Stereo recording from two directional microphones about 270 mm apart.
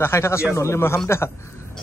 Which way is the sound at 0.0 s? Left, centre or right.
Centre.